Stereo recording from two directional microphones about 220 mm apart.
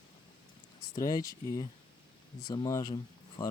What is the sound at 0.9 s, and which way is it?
Speech, 15° left (ahead or behind).